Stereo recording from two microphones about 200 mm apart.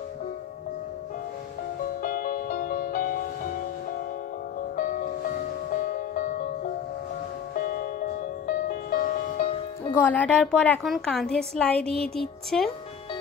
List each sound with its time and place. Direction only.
2.0 s music: 45° left (ahead or behind)
4.7 s music: 40° left (ahead or behind)
9.9 s a woman's voice: 10° left (ahead or behind)